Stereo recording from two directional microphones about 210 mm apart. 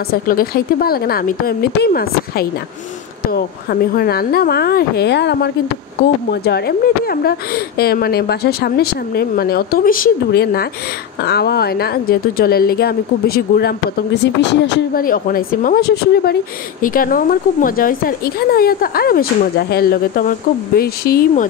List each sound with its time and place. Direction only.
0.1 s a woman's voice: 45° left (ahead or behind)
15.0 s a woman's voice: 40° left (ahead or behind)